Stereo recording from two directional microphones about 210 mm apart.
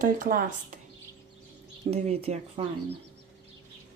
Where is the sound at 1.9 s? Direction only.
30° right (ahead or behind).